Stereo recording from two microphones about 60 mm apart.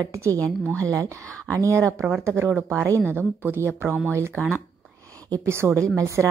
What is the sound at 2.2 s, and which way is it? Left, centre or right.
Speech, right.